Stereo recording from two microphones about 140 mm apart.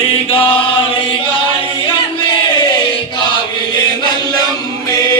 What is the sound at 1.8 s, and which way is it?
Chant, 40° left (ahead or behind).